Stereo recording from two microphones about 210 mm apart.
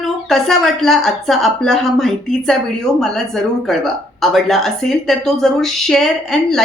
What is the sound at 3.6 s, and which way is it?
Speech, centre (ahead or behind).